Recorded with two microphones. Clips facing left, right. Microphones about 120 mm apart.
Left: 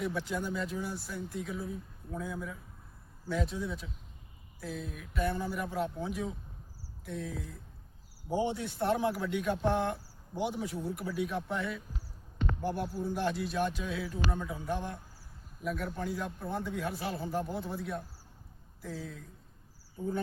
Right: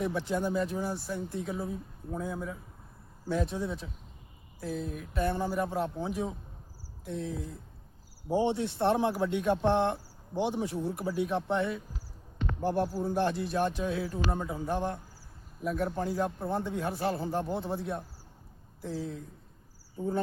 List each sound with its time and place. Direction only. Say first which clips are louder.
0.3 s speech: right 5 dB; 35° right (ahead or behind)